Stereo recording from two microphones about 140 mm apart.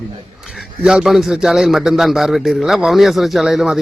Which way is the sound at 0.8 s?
5° right (ahead or behind).